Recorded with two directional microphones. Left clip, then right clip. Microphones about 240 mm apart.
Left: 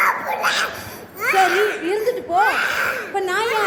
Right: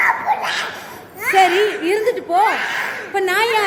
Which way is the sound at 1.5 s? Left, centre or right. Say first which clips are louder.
Right 2 dB; right.